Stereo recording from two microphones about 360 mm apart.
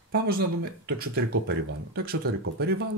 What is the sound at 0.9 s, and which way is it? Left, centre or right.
Speech, right.